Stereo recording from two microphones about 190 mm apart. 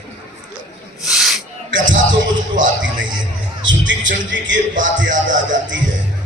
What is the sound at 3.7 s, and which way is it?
Speech, 80° right.